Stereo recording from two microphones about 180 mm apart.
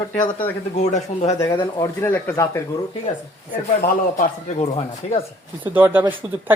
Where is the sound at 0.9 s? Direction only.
40° left (ahead or behind).